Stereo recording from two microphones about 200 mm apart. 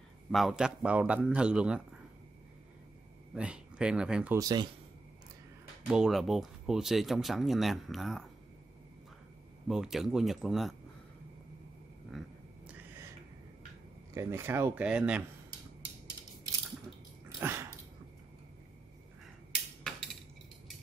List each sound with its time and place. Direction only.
0.3 s speech: centre (ahead or behind)
3.3 s speech: 5° right (ahead or behind)
4.4 s speech: 20° right (ahead or behind)
5.9 s speech: 5° right (ahead or behind)
9.7 s speech: centre (ahead or behind)
12.1 s a sound: centre (ahead or behind)
14.1 s speech: 15° right (ahead or behind)
17.4 s dog: 10° right (ahead or behind)